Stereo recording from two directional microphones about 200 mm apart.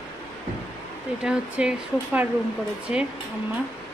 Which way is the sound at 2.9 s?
30° left (ahead or behind).